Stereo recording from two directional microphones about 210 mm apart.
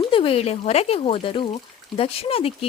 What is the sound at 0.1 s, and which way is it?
Speech, 25° left (ahead or behind).